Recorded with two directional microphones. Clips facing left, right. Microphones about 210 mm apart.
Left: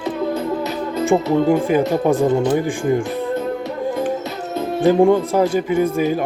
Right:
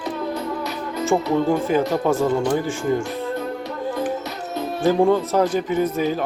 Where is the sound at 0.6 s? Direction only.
20° left (ahead or behind).